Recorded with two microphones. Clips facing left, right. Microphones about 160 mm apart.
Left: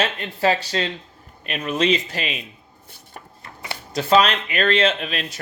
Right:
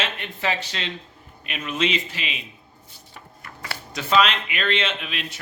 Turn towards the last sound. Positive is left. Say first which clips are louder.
# left 7 dB
turn(degrees=40)  # may be behind; listen again after turning